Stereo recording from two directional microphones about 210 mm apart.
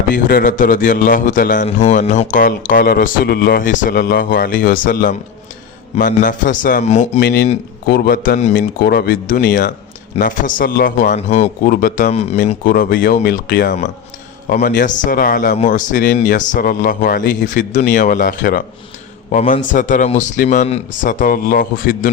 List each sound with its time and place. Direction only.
0.1 s a man's voice: 40° left (ahead or behind)
7.2 s speech: 50° left (ahead or behind)
8.5 s a man's voice: 50° left (ahead or behind)